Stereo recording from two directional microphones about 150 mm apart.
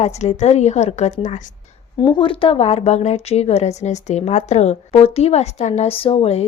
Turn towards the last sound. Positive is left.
turn(degrees=45)  # may be behind; listen again after turning